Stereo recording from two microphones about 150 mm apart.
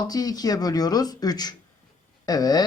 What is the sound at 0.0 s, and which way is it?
Speech, 25° left (ahead or behind).